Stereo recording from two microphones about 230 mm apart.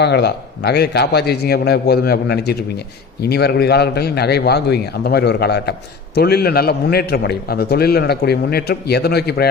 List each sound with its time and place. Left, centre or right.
0.0 s a man's voice: left